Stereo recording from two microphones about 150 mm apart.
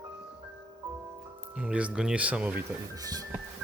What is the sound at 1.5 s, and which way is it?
Speech, 10° right (ahead or behind).